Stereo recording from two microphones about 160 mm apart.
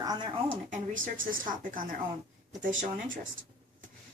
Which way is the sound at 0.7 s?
55° right (ahead or behind).